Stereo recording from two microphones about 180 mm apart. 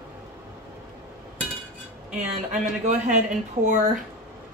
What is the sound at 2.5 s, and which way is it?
Speech, 40° right (ahead or behind).